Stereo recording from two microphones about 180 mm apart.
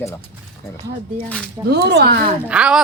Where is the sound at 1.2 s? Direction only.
5° left (ahead or behind).